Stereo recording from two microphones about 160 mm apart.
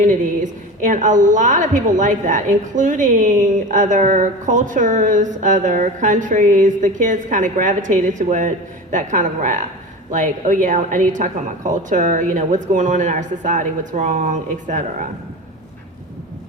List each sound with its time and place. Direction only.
0.8 s a woman's voice: 50° right (ahead or behind)